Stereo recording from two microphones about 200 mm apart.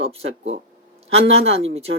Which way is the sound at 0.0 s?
30° right (ahead or behind).